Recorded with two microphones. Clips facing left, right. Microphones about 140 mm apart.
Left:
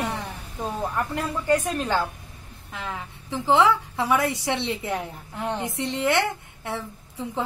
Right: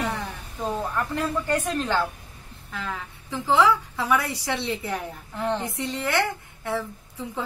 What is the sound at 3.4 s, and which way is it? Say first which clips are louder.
A woman's voice: left 1 dB; 20° left (ahead or behind).